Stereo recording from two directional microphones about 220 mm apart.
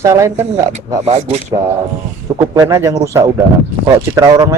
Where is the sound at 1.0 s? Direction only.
30° right (ahead or behind).